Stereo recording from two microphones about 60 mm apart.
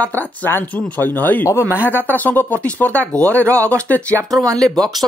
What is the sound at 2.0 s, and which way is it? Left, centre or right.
Speech, left.